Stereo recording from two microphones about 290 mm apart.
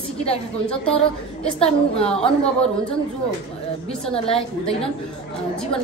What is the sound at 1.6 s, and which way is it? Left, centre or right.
Speech, left.